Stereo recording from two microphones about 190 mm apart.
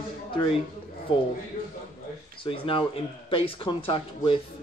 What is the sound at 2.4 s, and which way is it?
Speech, 30° left (ahead or behind).